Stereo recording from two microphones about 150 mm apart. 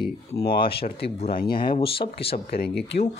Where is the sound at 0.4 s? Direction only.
90° left.